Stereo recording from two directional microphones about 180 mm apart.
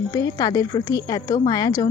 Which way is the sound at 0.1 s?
20° left (ahead or behind).